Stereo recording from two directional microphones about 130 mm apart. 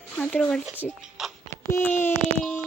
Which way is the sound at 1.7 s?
20° left (ahead or behind).